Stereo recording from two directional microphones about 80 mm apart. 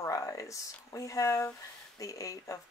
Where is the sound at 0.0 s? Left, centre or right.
Left.